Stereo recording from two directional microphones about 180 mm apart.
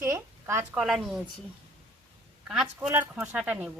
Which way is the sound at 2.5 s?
5° right (ahead or behind).